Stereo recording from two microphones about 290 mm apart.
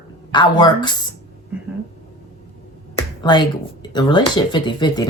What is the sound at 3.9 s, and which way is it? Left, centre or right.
Speech, centre.